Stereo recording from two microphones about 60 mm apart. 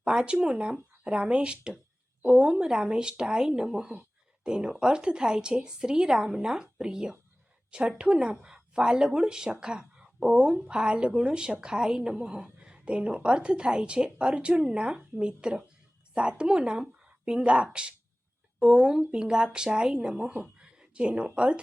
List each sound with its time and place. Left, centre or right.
0.0 s a woman's voice: centre